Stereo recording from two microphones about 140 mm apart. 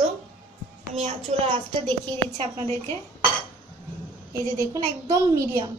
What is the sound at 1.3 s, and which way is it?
A woman's voice, 55° right (ahead or behind).